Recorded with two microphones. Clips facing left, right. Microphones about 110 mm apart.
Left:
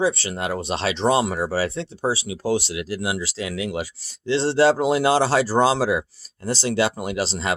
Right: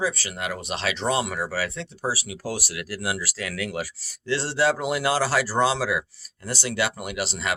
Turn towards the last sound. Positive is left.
turn(degrees=30)  # may be behind; listen again after turning